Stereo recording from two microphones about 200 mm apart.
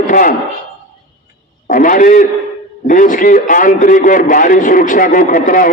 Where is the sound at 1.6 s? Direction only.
40° left (ahead or behind).